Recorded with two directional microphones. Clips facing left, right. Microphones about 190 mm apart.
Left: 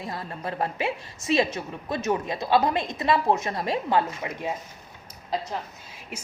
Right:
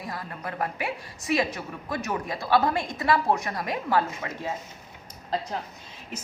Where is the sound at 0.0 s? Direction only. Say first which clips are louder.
Left 2 dB; 25° left (ahead or behind).